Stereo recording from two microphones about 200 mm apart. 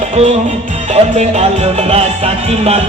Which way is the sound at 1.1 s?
35° right (ahead or behind).